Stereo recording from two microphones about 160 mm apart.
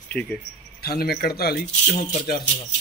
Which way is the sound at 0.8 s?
75° left (ahead or behind).